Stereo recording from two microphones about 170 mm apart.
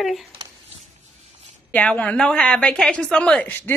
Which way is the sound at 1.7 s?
10° left (ahead or behind).